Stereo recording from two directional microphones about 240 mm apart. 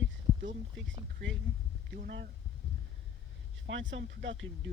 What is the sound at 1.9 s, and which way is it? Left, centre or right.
Speech, right.